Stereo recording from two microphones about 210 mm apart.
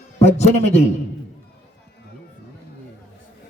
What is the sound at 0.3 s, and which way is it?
Speech, 30° left (ahead or behind).